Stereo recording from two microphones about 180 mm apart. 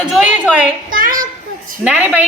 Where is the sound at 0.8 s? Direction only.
50° right (ahead or behind).